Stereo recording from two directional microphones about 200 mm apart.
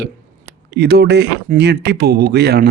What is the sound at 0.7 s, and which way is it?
Speech, 55° right (ahead or behind).